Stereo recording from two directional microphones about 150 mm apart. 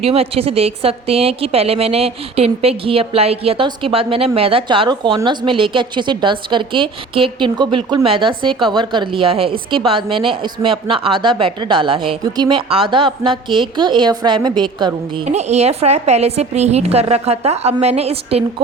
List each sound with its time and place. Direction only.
0.0 s a woman's voice: 40° right (ahead or behind)
15.3 s a woman's voice: 45° right (ahead or behind)